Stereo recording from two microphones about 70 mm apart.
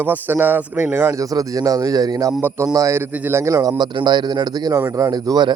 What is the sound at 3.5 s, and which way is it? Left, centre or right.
Speech, right.